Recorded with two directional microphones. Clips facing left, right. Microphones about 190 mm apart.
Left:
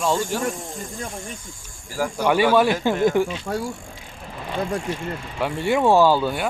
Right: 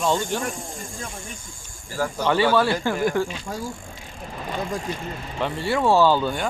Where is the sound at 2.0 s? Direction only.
10° left (ahead or behind).